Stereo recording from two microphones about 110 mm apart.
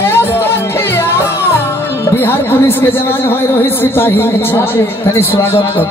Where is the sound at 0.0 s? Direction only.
20° left (ahead or behind).